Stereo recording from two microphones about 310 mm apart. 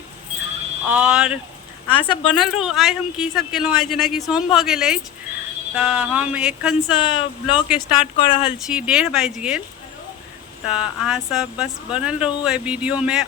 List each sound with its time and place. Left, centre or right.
0.9 s speech: centre
1.9 s speech: centre
2.4 s speech: centre
7.0 s speech: centre
8.4 s speech: centre
10.7 s speech: centre